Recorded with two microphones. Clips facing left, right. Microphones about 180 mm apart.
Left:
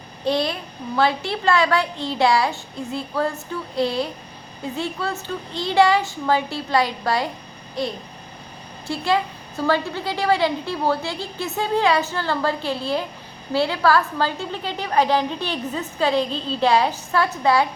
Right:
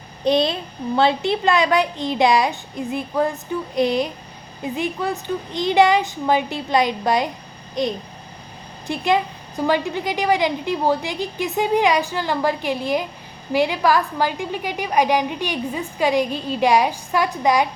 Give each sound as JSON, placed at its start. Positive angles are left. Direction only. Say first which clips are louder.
{"t": 0.3, "sound": "a woman's voice", "louder": "right 4 dB", "side_deg": -20}
{"t": 7.8, "sound": "babbling", "louder": "right 3 dB", "side_deg": -20}
{"t": 8.9, "sound": "a woman's voice", "louder": "right 2 dB", "side_deg": -20}